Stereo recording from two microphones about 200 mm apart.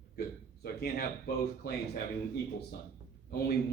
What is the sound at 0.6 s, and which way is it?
Speech, 50° left (ahead or behind).